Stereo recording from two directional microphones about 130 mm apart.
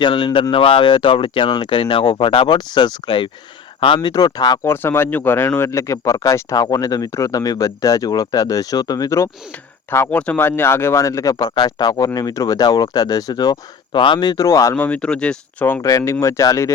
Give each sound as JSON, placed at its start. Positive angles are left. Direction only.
{"t": 0.0, "sound": "speech", "side_deg": 35}
{"t": 4.6, "sound": "speech", "side_deg": 20}
{"t": 14.8, "sound": "speech", "side_deg": 10}
{"t": 15.8, "sound": "speech", "side_deg": 25}